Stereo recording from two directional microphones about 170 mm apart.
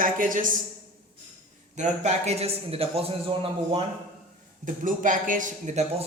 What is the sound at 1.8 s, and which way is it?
A man's voice, 45° right (ahead or behind).